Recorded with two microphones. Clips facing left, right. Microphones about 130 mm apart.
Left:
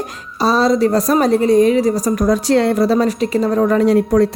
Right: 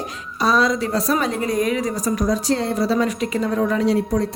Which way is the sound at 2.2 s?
65° left (ahead or behind).